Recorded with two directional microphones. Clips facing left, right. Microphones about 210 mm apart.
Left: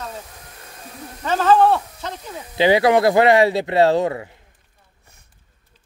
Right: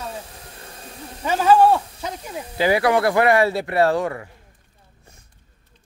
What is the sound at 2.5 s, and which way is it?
Speech, 25° left (ahead or behind).